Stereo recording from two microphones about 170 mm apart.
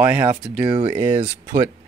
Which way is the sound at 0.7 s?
40° right (ahead or behind).